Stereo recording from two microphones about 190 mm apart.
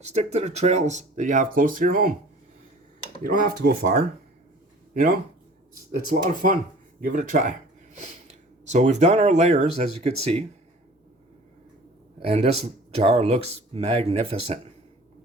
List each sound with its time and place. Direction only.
0.1 s speech: 35° right (ahead or behind)
3.2 s speech: 50° right (ahead or behind); by 10.4 s 35° right (ahead or behind)
12.2 s speech: 30° right (ahead or behind)